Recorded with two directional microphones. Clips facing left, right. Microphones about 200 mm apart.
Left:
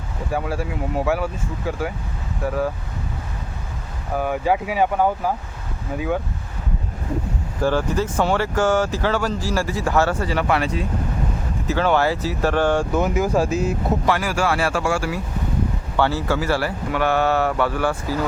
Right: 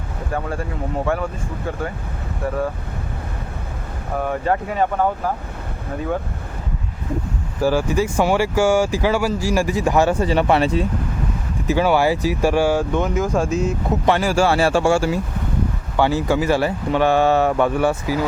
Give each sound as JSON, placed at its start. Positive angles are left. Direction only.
{"t": 0.3, "sound": "speech", "side_deg": 5}
{"t": 4.2, "sound": "speech", "side_deg": 5}
{"t": 7.6, "sound": "speech", "side_deg": -10}
{"t": 11.7, "sound": "speech", "side_deg": -10}
{"t": 12.9, "sound": "speech", "side_deg": 5}
{"t": 14.0, "sound": "speech", "side_deg": -25}
{"t": 16.0, "sound": "speech", "side_deg": -15}
{"t": 18.0, "sound": "speech", "side_deg": -10}